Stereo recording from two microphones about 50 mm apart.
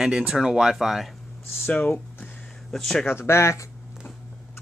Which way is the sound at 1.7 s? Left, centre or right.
Left.